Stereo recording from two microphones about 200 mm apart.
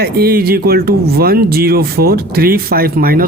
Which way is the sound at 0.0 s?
50° right (ahead or behind).